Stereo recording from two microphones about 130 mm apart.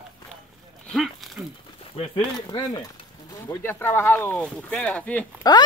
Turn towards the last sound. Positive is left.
turn(degrees=30)  # may be behind; listen again after turning